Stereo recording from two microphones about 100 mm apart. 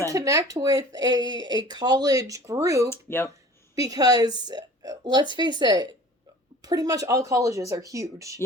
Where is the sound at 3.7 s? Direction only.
40° right (ahead or behind).